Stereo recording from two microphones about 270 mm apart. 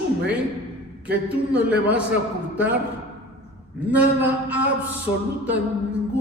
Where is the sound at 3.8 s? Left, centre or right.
Centre.